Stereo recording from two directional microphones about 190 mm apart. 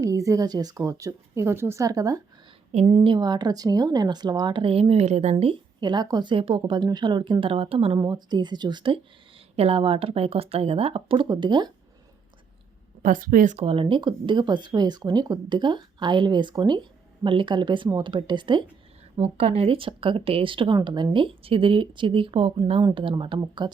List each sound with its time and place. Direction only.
0.0 s speech: 15° right (ahead or behind)
13.0 s speech: 45° right (ahead or behind); by 23.7 s 25° right (ahead or behind)